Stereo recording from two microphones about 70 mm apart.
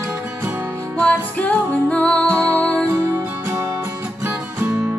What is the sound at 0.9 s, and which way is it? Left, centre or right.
Music, centre.